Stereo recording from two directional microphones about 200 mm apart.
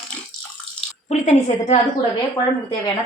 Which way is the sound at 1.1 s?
35° left (ahead or behind).